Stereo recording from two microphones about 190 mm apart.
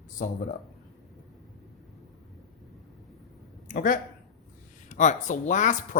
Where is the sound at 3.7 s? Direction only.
45° left (ahead or behind).